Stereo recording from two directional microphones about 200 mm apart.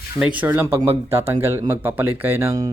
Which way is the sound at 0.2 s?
5° right (ahead or behind).